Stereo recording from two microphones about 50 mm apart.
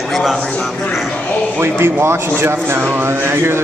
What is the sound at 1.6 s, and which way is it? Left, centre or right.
A man's voice, right.